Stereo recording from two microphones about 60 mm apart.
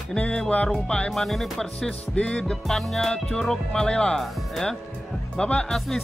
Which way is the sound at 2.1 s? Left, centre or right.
Centre.